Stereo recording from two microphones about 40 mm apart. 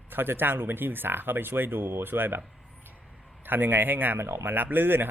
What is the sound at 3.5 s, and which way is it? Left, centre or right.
Speech, right.